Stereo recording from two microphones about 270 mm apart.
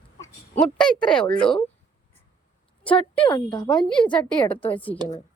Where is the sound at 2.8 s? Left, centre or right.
Centre.